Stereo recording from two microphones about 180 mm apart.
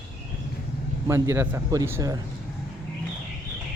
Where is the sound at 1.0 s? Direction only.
15° right (ahead or behind).